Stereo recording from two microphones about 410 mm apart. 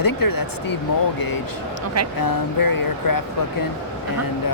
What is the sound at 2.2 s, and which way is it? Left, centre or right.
Speech, left.